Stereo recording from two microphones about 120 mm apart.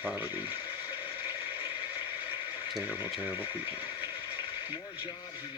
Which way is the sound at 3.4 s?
50° left (ahead or behind).